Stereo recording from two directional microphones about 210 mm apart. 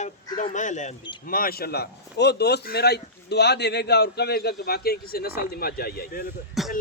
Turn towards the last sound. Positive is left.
turn(degrees=0)  # may be behind; listen again after turning